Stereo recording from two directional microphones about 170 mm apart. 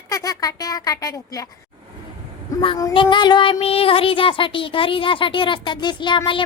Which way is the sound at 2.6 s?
25° left (ahead or behind).